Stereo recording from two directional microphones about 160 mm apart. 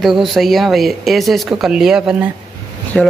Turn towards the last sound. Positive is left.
turn(degrees=5)  # may be behind; listen again after turning